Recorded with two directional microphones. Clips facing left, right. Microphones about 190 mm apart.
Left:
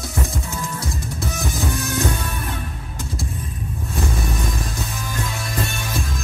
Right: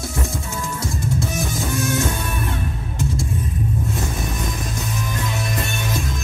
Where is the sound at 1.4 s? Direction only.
25° right (ahead or behind).